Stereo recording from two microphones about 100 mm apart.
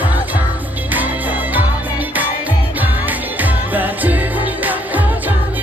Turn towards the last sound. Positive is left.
turn(degrees=-15)  # may be behind; listen again after turning